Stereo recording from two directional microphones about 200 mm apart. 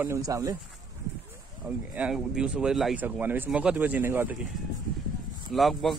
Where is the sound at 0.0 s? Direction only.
15° right (ahead or behind).